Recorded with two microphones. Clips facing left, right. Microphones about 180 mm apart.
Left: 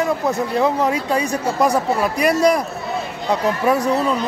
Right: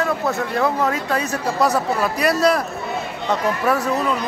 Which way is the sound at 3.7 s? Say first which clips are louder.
Left 3 dB; 15° left (ahead or behind).